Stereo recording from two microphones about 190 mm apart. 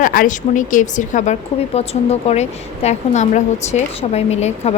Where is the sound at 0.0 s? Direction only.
45° left (ahead or behind).